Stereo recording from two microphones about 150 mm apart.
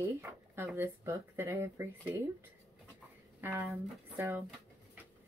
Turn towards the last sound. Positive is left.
turn(degrees=-15)  # may be behind; listen again after turning